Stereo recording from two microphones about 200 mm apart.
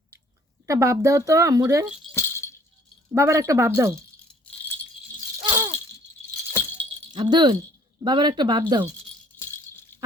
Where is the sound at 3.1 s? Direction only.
15° right (ahead or behind).